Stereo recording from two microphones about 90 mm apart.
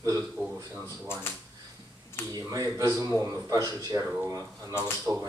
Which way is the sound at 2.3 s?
40° right (ahead or behind).